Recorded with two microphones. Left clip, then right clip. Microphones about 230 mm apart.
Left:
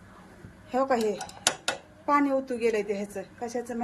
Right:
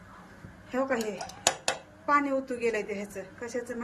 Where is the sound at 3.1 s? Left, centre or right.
Centre.